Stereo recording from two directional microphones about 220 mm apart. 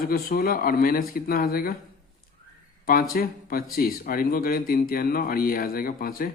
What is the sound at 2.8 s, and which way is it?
Speech, 40° left (ahead or behind).